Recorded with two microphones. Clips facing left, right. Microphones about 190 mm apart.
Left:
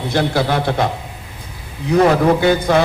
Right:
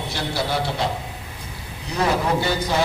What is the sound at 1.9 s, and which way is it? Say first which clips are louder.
Speech: left 9 dB; 55° left (ahead or behind).